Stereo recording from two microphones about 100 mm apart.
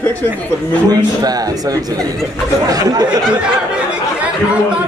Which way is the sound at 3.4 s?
10° right (ahead or behind).